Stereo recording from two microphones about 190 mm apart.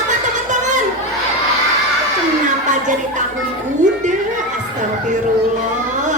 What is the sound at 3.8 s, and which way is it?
Music, 40° right (ahead or behind).